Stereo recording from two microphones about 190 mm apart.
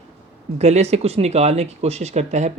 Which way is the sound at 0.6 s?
35° right (ahead or behind).